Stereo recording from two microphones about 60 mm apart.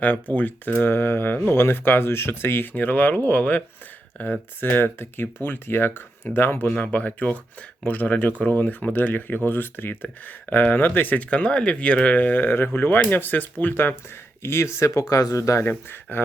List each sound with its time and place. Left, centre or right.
0.0 s speech: left
14.4 s speech: left
15.1 s speech: left
15.9 s speech: left